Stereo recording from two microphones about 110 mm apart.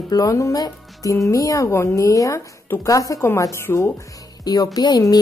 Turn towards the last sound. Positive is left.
turn(degrees=35)  # may be behind; listen again after turning